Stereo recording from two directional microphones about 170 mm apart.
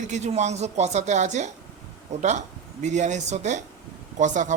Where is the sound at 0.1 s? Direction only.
40° right (ahead or behind).